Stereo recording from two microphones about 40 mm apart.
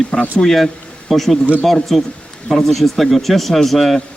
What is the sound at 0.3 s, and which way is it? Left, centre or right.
A man's voice, centre.